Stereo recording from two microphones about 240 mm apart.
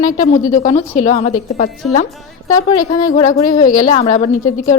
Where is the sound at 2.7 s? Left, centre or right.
Left.